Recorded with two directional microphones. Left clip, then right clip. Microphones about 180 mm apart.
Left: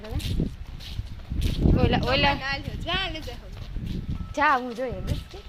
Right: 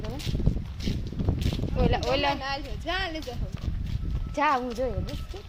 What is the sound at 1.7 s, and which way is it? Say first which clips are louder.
Speech: left 2 dB; 10° left (ahead or behind).